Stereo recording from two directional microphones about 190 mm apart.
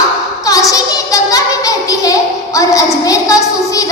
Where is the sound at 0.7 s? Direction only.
20° left (ahead or behind).